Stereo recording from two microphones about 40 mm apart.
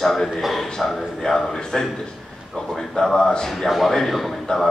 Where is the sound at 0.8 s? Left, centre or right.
Centre.